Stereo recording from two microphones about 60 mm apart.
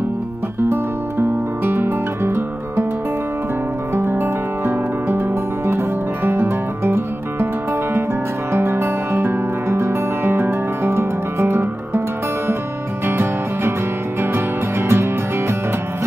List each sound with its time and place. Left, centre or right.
1.6 s music: right
3.9 s music: right
8.5 s music: right
13.0 s music: right